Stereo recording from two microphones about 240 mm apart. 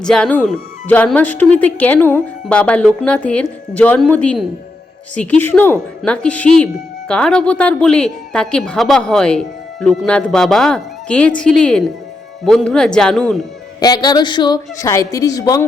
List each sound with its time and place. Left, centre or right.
0.0 s speech: centre
13.7 s a woman's voice: centre